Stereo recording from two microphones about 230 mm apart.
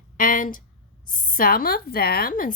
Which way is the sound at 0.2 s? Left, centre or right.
Left.